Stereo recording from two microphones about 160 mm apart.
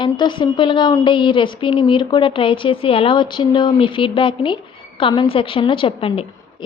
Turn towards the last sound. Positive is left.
turn(degrees=35)  # may be behind; listen again after turning